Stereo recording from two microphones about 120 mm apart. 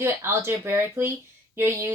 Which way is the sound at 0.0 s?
20° right (ahead or behind).